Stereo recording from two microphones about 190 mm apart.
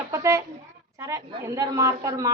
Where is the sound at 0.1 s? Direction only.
15° right (ahead or behind).